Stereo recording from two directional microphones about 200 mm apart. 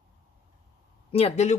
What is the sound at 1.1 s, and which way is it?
Speech, 30° left (ahead or behind).